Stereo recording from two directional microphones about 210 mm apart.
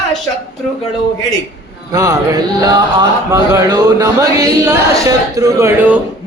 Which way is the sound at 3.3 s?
15° right (ahead or behind).